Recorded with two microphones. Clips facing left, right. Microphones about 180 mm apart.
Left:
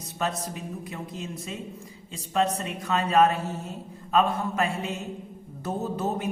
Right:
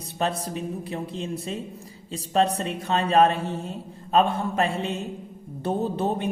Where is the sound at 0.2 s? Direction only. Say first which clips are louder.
Right 3 dB; 30° right (ahead or behind).